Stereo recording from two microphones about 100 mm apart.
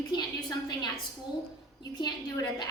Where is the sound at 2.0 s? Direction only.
40° left (ahead or behind).